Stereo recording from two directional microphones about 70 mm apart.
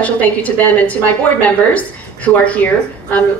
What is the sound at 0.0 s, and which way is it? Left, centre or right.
A woman's voice, left.